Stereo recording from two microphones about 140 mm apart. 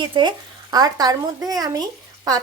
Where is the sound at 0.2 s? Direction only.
30° right (ahead or behind).